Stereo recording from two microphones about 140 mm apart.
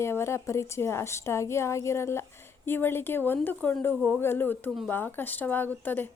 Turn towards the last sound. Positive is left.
turn(degrees=15)  # may be behind; listen again after turning